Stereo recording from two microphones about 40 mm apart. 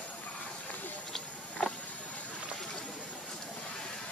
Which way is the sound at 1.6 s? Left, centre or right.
Centre.